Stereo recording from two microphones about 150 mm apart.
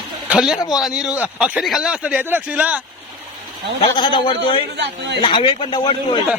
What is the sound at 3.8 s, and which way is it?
Speech, 35° left (ahead or behind).